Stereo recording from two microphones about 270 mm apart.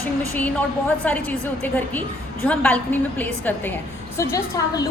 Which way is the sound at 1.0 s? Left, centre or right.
Centre.